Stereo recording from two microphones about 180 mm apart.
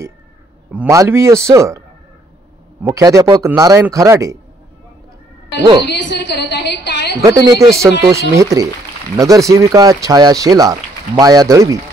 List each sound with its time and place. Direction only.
0.7 s a man's voice: 5° right (ahead or behind)
2.8 s speech: 20° right (ahead or behind)
5.9 s a woman's voice: 75° left (ahead or behind)
7.2 s speech: 20° right (ahead or behind)